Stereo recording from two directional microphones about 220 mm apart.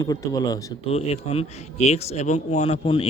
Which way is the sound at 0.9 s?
25° left (ahead or behind).